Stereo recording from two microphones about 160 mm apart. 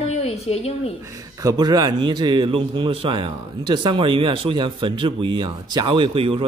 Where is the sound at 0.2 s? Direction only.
40° left (ahead or behind).